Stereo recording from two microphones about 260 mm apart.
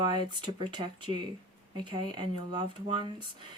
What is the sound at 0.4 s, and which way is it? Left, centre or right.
Speech, centre.